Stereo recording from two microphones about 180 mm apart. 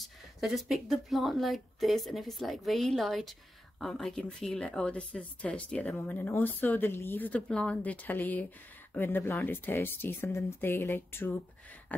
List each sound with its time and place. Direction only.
0.0 s speech: centre (ahead or behind)